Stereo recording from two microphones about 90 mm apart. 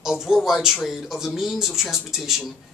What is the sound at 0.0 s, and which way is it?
Speech, 5° right (ahead or behind).